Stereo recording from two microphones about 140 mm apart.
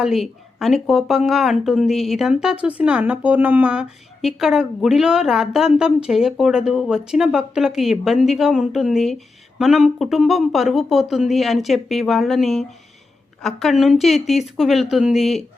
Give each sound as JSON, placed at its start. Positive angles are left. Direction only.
{"t": 0.0, "sound": "speech", "side_deg": 0}